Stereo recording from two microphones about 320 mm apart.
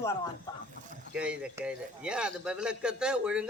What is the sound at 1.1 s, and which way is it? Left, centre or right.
A man's voice, centre.